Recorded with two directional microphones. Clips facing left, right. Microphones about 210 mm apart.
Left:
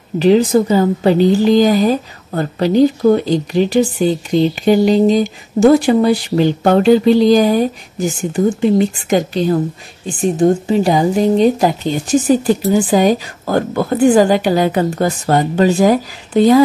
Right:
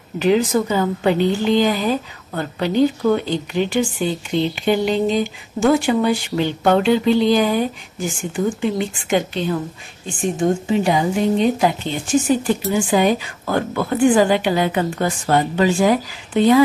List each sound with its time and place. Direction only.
0.2 s a woman's voice: 35° left (ahead or behind)